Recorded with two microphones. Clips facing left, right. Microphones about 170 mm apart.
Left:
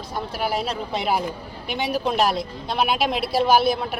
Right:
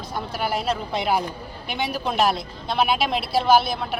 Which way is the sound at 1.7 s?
35° left (ahead or behind).